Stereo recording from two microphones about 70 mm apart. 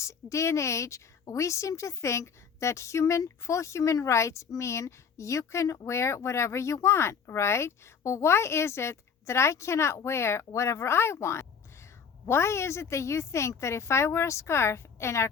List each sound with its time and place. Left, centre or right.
0.0 s a woman's voice: left